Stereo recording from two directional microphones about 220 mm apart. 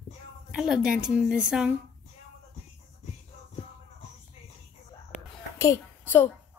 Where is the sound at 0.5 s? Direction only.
5° right (ahead or behind).